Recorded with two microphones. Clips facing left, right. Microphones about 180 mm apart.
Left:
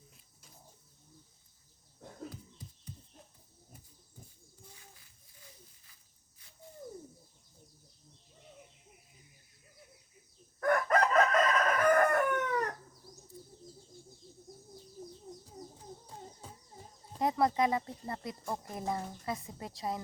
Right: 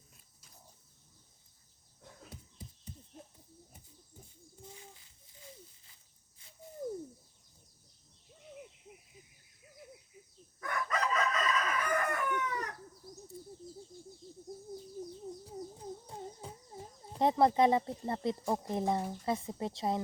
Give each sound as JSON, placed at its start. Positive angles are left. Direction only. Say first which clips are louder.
{"t": 4.7, "sound": "a sound", "louder": "right 6 dB", "side_deg": -25}
{"t": 10.6, "sound": "crowing", "louder": "left 8 dB", "side_deg": 55}
{"t": 17.2, "sound": "speech", "louder": "right 3 dB", "side_deg": -25}